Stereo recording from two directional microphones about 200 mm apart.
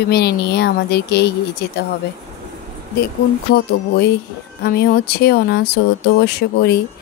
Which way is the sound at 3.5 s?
55° left (ahead or behind).